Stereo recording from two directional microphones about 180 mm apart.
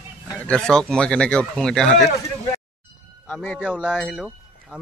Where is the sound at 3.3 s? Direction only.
5° left (ahead or behind).